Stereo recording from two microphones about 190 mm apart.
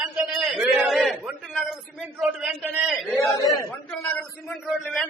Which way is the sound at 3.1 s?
15° left (ahead or behind).